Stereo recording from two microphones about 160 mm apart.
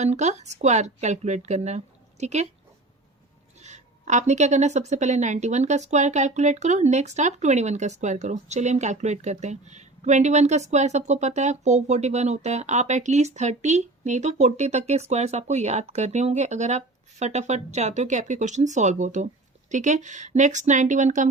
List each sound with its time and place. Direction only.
0.0 s a woman's voice: 45° right (ahead or behind)
3.6 s a woman's voice: 45° right (ahead or behind)